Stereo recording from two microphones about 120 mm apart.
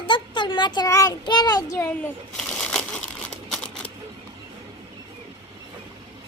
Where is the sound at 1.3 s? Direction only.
35° left (ahead or behind).